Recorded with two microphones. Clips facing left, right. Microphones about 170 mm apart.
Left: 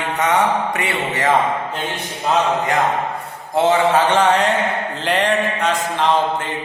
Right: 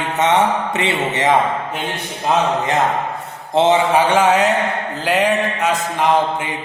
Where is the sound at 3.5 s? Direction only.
20° right (ahead or behind).